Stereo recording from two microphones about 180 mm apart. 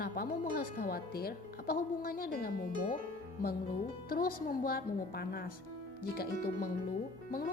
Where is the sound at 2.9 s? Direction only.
55° left (ahead or behind).